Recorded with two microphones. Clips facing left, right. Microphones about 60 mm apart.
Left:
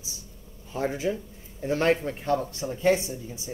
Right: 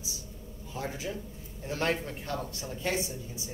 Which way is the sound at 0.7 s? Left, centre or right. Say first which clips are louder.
Left 8 dB; left.